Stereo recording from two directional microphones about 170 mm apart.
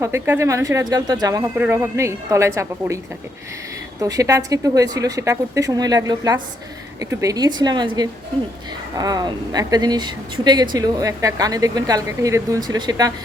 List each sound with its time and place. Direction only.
0.0 s speech: 15° right (ahead or behind)
4.0 s speech: 20° right (ahead or behind)